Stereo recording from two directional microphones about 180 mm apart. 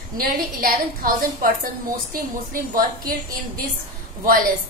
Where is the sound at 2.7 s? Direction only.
50° right (ahead or behind).